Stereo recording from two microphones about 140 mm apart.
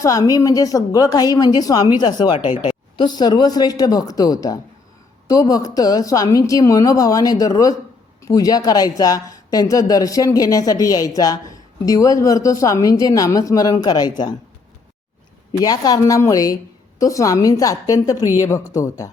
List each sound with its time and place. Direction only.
0.0 s a woman's voice: 25° left (ahead or behind)
15.6 s a woman's voice: 25° left (ahead or behind)